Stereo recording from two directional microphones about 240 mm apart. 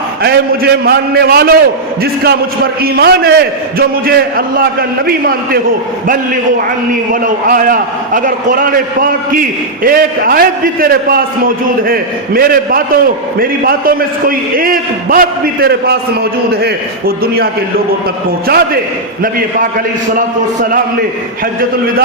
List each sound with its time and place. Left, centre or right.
0.2 s a man's voice: right
2.8 s a man's voice: right
7.1 s a man's voice: right
20.1 s a man's voice: right